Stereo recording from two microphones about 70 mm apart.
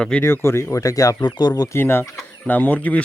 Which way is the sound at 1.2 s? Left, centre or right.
Left.